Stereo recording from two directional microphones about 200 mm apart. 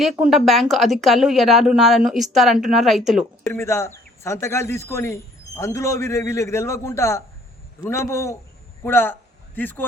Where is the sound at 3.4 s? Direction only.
15° left (ahead or behind).